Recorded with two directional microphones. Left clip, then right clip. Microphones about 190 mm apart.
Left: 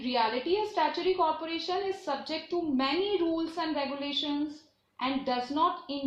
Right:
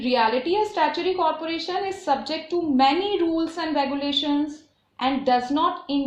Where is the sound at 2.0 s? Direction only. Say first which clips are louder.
Right 9 dB; 40° right (ahead or behind).